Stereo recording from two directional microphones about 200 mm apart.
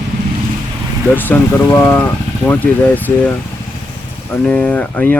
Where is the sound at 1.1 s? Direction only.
10° left (ahead or behind).